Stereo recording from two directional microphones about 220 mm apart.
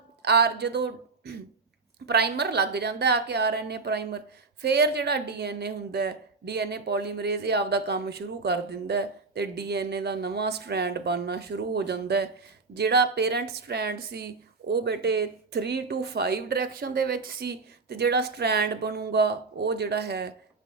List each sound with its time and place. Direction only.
0.2 s speech: 50° right (ahead or behind)